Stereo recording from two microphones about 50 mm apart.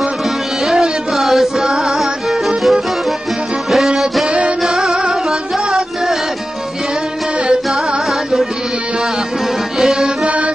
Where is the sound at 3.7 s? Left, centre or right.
Centre.